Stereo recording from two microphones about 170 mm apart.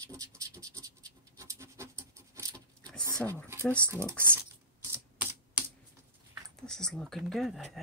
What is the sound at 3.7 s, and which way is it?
Typing, 15° right (ahead or behind).